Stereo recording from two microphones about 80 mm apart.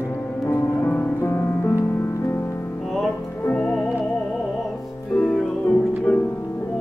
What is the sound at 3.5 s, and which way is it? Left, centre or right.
Music, left.